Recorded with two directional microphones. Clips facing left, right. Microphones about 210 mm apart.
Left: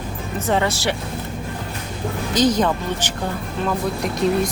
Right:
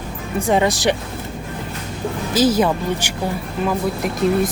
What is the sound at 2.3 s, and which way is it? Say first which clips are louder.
Speech: right 2 dB; 5° right (ahead or behind).